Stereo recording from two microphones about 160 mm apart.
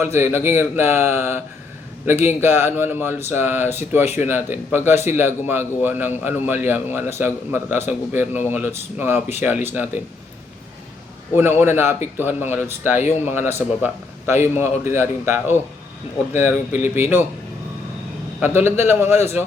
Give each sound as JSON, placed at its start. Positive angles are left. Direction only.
{"t": 0.0, "sound": "a man's voice", "side_deg": -15}
{"t": 11.3, "sound": "a man's voice", "side_deg": -15}
{"t": 12.9, "sound": "speech", "side_deg": 45}
{"t": 13.2, "sound": "a man's voice", "side_deg": -15}
{"t": 16.8, "sound": "speech", "side_deg": 45}
{"t": 18.3, "sound": "a man's voice", "side_deg": -15}